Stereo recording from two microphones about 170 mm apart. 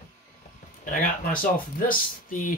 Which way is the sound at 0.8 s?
50° left (ahead or behind).